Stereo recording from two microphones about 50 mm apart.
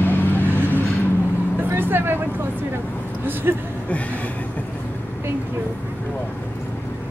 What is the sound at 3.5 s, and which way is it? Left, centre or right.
Speech, right.